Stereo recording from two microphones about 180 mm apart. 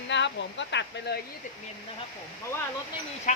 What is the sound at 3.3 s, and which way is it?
Speech, 40° left (ahead or behind).